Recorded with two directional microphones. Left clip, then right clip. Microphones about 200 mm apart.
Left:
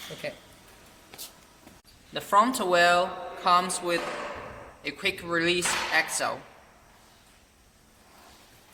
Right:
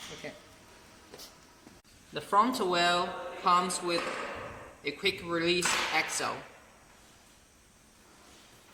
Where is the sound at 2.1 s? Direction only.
50° left (ahead or behind).